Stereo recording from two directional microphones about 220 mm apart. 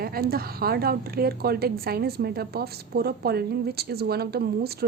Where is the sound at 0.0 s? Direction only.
45° right (ahead or behind).